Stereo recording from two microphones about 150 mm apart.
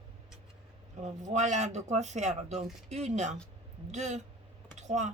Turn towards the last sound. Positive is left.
turn(degrees=-50)  # may be behind; listen again after turning